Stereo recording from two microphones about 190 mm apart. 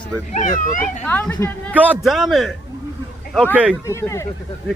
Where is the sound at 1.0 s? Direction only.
10° left (ahead or behind).